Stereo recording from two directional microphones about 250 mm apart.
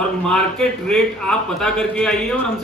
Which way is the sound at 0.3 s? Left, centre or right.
Centre.